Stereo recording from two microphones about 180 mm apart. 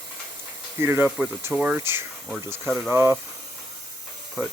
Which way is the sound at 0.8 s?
15° right (ahead or behind).